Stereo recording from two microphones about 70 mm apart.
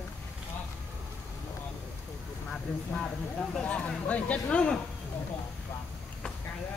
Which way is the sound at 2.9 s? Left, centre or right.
Centre.